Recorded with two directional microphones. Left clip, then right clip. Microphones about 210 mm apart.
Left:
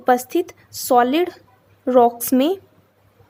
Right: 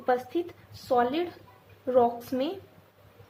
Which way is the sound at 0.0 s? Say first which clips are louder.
Left 10 dB; 50° left (ahead or behind).